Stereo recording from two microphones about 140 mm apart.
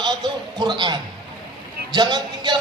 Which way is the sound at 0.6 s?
30° right (ahead or behind).